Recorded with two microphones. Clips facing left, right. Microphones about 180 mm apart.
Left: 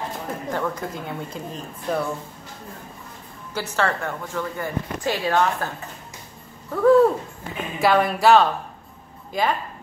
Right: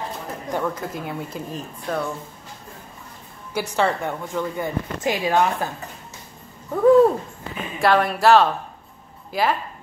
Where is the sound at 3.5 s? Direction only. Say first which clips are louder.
Right 2 dB; 15° right (ahead or behind).